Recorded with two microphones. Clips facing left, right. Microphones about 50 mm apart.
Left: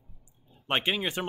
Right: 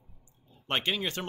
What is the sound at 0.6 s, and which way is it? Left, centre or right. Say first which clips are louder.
Speech: left 2 dB; centre.